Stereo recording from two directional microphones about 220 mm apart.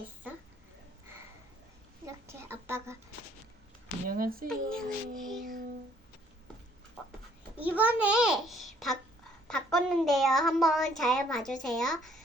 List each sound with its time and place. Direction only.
2.0 s a sound: 10° right (ahead or behind)
4.0 s speech: 40° right (ahead or behind)
4.4 s speech: 5° left (ahead or behind)
5.4 s speech: 40° right (ahead or behind)
7.5 s speech: 5° right (ahead or behind)